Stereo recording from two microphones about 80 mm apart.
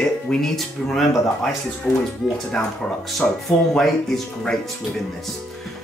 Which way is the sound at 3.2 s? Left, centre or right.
Centre.